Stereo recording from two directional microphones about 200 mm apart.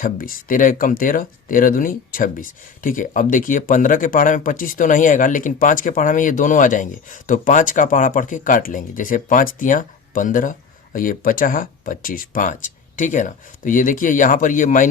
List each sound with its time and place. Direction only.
0.0 s speech: 45° left (ahead or behind)